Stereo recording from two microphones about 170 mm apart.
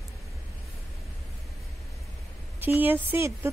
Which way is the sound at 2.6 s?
10° right (ahead or behind).